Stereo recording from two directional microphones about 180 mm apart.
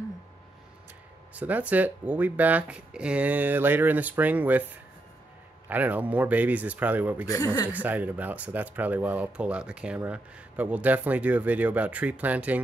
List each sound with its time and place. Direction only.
1.3 s speech: 10° right (ahead or behind)
5.7 s speech: 10° right (ahead or behind)
7.2 s speech: 20° left (ahead or behind)
7.7 s speech: 10° right (ahead or behind)